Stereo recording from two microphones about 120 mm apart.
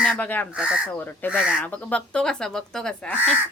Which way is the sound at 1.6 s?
15° left (ahead or behind).